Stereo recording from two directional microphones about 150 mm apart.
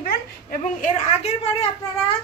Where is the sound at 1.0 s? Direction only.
45° left (ahead or behind).